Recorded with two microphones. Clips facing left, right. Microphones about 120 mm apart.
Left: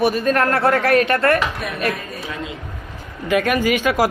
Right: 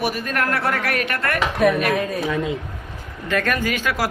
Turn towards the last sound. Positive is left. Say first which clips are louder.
# left 5 dB
turn(degrees=15)  # may be behind; listen again after turning